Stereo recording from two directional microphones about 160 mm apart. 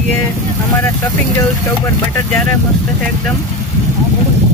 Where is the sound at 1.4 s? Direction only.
20° left (ahead or behind).